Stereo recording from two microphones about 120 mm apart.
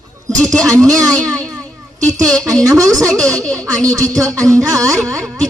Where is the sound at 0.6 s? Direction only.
30° right (ahead or behind).